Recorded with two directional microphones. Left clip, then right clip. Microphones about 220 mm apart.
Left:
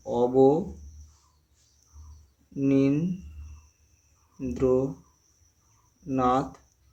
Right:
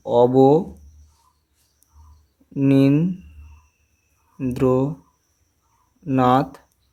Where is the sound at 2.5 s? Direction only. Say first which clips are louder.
Right 7 dB; 45° right (ahead or behind).